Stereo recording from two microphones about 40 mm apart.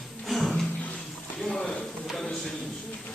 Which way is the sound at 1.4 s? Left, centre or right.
Centre.